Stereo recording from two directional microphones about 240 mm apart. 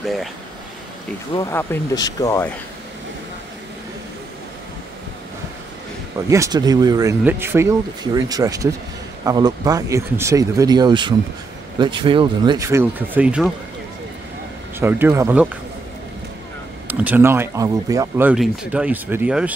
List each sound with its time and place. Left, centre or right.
0.0 s speech: centre
1.3 s speech: centre
6.3 s speech: centre
14.8 s speech: centre
16.8 s speech: centre